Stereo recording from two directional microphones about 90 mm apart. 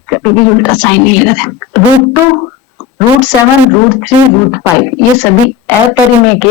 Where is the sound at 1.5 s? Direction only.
20° left (ahead or behind).